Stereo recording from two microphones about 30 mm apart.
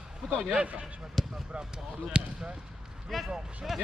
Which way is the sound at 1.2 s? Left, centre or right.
Centre.